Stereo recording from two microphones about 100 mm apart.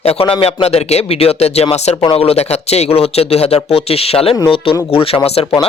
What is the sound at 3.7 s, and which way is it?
Speech, 80° left.